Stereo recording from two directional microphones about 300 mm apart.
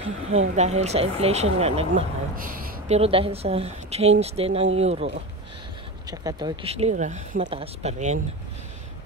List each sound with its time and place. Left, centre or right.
0.0 s speech: right